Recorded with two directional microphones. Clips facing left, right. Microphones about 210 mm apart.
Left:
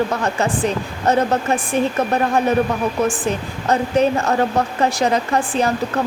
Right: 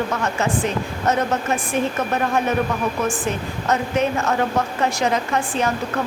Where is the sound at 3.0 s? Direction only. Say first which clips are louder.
Left 3 dB; 35° left (ahead or behind).